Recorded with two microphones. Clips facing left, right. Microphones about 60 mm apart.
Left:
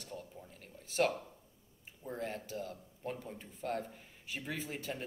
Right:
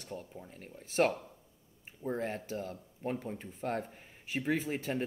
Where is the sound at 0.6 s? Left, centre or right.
Right.